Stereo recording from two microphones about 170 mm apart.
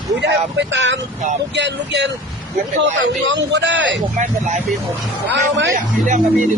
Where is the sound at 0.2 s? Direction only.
90° right.